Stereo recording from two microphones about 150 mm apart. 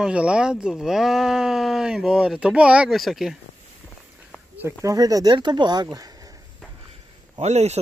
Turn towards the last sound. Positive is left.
turn(degrees=-50)  # may be behind; listen again after turning